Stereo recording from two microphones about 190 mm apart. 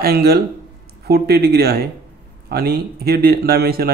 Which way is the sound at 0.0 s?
55° right (ahead or behind).